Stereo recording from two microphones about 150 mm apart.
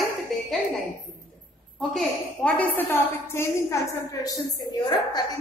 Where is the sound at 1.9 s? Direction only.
5° left (ahead or behind).